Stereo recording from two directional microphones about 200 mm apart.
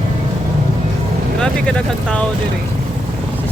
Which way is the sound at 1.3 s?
5° left (ahead or behind).